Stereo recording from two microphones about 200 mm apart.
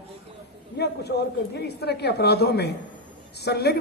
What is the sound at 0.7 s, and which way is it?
A man's voice, 55° left (ahead or behind).